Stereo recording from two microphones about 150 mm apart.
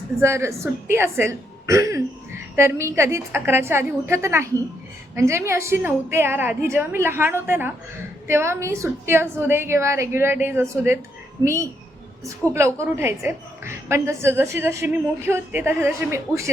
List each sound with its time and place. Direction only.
0.2 s a woman's voice: 20° right (ahead or behind)